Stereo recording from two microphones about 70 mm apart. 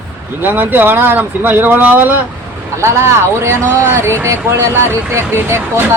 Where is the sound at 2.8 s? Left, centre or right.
Right.